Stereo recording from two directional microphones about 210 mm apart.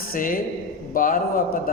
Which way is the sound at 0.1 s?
40° left (ahead or behind).